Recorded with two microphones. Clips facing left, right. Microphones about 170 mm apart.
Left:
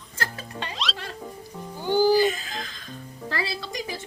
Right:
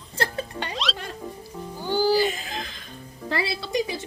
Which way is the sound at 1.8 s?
15° left (ahead or behind).